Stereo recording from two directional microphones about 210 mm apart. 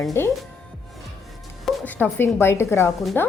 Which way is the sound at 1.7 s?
10° left (ahead or behind).